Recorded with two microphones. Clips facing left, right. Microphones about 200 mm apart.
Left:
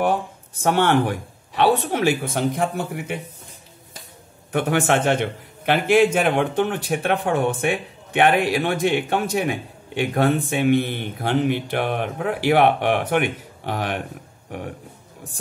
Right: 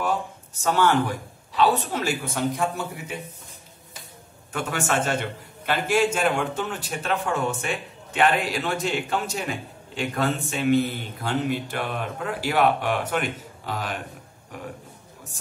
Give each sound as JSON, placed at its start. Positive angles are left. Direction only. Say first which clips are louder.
{"t": 0.6, "sound": "speech", "louder": "left 3 dB", "side_deg": 60}
{"t": 4.5, "sound": "speech", "louder": "left 7 dB", "side_deg": 55}